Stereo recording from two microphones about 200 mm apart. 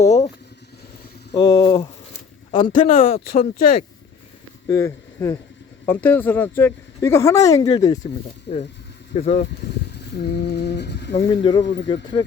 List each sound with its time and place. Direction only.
0.0 s speech: 35° left (ahead or behind)
1.4 s speech: 25° left (ahead or behind)
3.2 s speech: 45° left (ahead or behind)
4.7 s speech: 15° left (ahead or behind)
8.5 s a sound: 55° left (ahead or behind)
9.1 s speech: 35° left (ahead or behind)
10.2 s a sound: 55° left (ahead or behind)
12.2 s speech: 20° left (ahead or behind)